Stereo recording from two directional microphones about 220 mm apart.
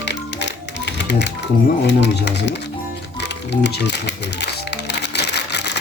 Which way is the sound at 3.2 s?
50° left (ahead or behind).